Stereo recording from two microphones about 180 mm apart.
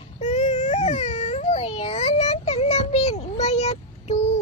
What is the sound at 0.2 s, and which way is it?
Baby cry, 40° left (ahead or behind).